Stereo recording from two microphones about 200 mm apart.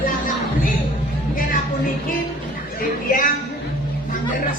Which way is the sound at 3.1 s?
40° left (ahead or behind).